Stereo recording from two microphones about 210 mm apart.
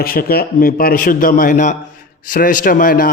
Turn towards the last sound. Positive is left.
turn(degrees=45)  # may be behind; listen again after turning